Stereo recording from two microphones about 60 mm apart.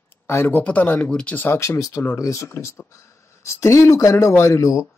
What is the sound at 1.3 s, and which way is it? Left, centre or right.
Speech, left.